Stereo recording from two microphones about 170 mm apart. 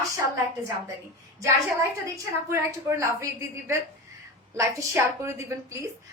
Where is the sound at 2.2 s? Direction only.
15° right (ahead or behind).